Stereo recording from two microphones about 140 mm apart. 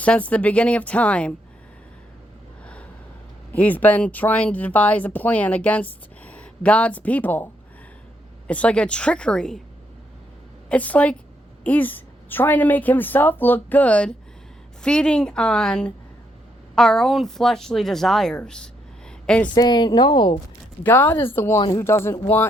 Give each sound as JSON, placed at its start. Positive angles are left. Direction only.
{"t": 0.0, "sound": "speech", "side_deg": 10}
{"t": 3.5, "sound": "speech", "side_deg": 10}
{"t": 10.7, "sound": "a woman's voice", "side_deg": 10}
{"t": 19.5, "sound": "a woman's voice", "side_deg": 30}
{"t": 20.8, "sound": "speech", "side_deg": 15}